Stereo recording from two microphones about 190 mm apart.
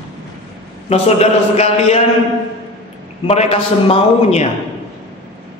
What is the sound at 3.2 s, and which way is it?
A man's voice, 30° left (ahead or behind).